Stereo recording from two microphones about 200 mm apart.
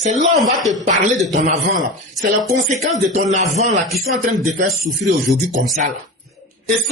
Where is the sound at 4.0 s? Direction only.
45° right (ahead or behind).